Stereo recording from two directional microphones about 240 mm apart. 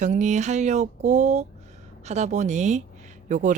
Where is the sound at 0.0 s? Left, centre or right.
Right.